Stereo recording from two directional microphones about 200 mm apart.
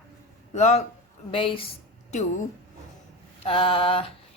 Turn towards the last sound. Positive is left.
turn(degrees=25)  # may be behind; listen again after turning